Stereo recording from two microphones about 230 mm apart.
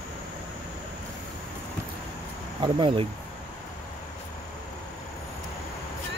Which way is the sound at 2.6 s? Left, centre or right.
Right.